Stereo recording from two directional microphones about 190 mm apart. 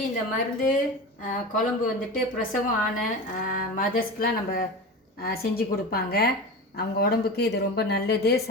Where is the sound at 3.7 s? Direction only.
50° left (ahead or behind).